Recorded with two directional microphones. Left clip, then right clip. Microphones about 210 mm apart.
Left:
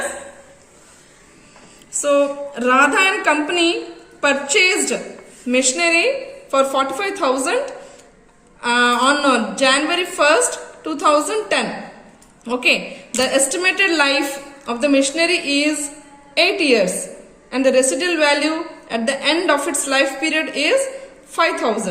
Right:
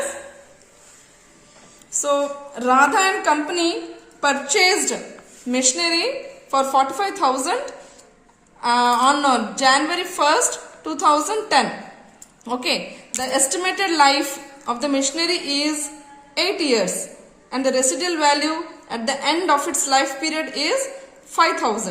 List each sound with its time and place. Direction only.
2.0 s a woman's voice: 30° right (ahead or behind)